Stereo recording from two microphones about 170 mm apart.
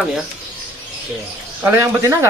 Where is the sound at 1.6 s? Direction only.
20° right (ahead or behind).